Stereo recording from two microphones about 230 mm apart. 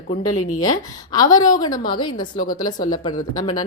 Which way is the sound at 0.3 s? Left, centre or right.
Left.